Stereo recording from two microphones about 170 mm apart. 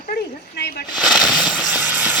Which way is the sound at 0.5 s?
70° left (ahead or behind).